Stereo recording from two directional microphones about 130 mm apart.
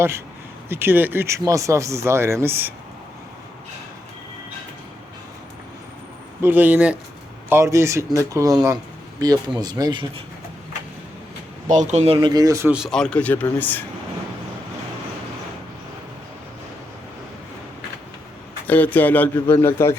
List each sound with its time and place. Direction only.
0.7 s speech: 15° right (ahead or behind)
6.4 s speech: 15° right (ahead or behind); by 10.2 s 40° right (ahead or behind)
11.7 s speech: 70° right (ahead or behind)
12.1 s speech: 35° right (ahead or behind)
12.9 s speech: 5° left (ahead or behind)
18.7 s speech: 15° left (ahead or behind)